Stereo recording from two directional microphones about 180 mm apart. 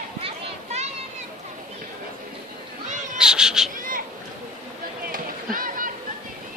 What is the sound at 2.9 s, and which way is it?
Cat, 45° right (ahead or behind).